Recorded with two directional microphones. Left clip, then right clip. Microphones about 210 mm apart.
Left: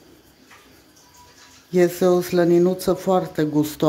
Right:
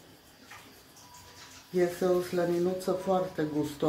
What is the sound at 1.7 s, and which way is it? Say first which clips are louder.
Speech: left 10 dB; 50° left (ahead or behind).